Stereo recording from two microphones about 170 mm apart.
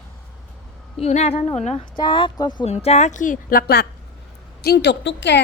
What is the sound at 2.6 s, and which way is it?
A woman's voice, 40° left (ahead or behind).